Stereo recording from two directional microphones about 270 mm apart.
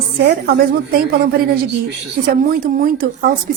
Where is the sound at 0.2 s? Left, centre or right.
Right.